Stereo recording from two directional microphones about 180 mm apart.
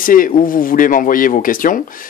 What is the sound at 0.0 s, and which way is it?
Speech, 50° left (ahead or behind).